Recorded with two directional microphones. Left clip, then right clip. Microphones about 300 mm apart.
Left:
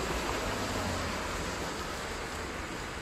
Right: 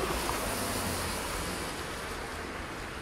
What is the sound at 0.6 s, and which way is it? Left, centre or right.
Vehicle, right.